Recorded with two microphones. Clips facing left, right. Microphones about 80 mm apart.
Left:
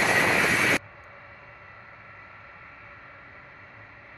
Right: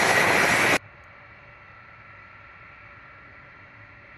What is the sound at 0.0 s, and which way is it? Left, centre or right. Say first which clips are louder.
Vehicle: right 2 dB; right.